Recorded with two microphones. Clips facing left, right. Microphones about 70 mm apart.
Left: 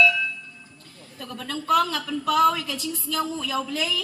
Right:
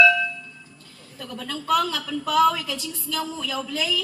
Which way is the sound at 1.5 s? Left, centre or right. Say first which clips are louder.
Left 1 dB; left.